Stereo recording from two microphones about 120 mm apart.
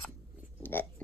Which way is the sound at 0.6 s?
15° left (ahead or behind).